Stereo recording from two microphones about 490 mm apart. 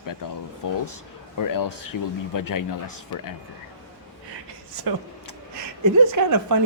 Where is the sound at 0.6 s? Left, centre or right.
Left.